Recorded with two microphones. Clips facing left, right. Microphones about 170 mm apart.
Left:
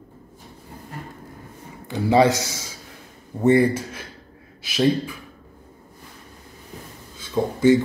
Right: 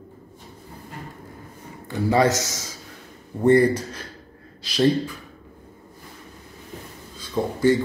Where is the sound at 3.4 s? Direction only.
10° left (ahead or behind).